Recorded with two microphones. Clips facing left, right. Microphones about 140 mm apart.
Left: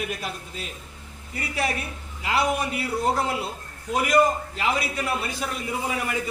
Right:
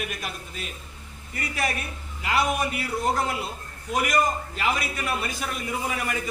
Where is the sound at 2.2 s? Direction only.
25° left (ahead or behind).